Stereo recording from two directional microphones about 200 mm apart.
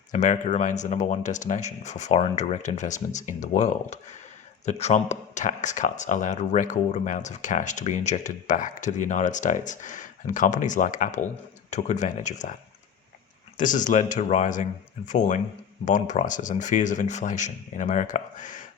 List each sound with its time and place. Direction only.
0.1 s speech: 35° left (ahead or behind)
13.6 s speech: 40° left (ahead or behind)